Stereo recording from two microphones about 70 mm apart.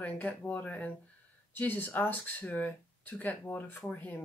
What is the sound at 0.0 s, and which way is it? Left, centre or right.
Speech, left.